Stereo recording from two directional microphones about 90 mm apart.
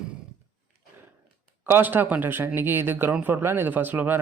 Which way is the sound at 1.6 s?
20° right (ahead or behind).